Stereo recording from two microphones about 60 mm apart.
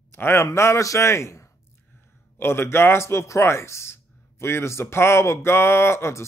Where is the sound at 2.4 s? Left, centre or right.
Left.